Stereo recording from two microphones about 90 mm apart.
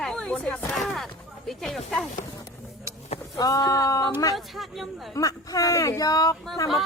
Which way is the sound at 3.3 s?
45° left (ahead or behind).